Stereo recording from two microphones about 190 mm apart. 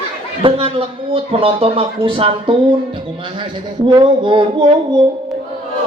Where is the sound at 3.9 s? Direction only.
25° right (ahead or behind).